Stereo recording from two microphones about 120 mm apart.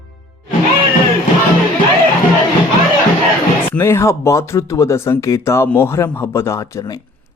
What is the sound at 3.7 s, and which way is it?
Speech, 20° left (ahead or behind).